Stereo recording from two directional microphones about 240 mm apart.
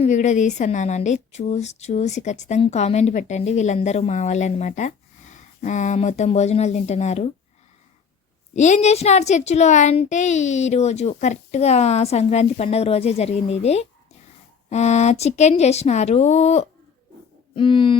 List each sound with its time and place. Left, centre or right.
0.0 s a woman's voice: left
8.5 s a woman's voice: left
17.5 s a sound: left